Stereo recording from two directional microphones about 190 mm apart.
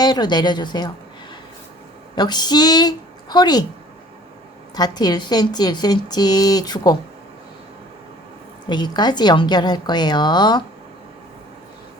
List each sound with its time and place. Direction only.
0.0 s speech: 20° left (ahead or behind)
2.1 s a woman's voice: 20° left (ahead or behind)
4.7 s speech: 20° left (ahead or behind)
8.7 s speech: 20° left (ahead or behind)